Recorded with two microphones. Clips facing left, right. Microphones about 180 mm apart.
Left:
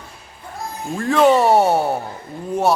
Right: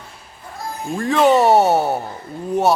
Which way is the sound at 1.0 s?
Centre (ahead or behind).